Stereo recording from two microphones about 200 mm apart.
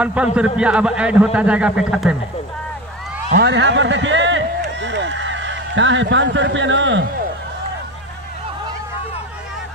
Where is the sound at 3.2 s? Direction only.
55° right (ahead or behind).